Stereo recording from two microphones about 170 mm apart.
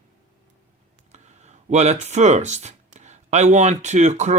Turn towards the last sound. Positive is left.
turn(degrees=-45)  # may be behind; listen again after turning